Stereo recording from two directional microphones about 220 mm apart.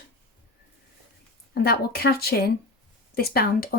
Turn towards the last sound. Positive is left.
turn(degrees=45)  # may be behind; listen again after turning